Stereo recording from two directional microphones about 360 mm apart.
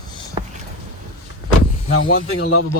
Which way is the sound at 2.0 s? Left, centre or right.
Left.